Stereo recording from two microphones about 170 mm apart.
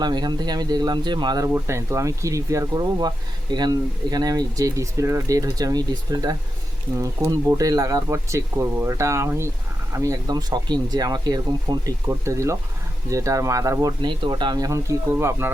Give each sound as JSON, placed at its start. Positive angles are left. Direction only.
{"t": 0.0, "sound": "speech", "side_deg": -25}
{"t": 1.5, "sound": "speech", "side_deg": -15}